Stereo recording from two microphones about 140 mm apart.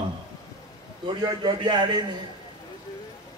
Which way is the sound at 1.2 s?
30° right (ahead or behind).